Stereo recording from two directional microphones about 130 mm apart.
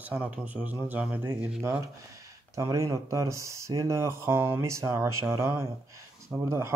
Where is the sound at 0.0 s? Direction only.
10° right (ahead or behind).